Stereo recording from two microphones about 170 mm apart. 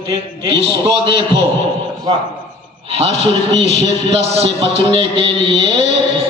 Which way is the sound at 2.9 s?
35° right (ahead or behind).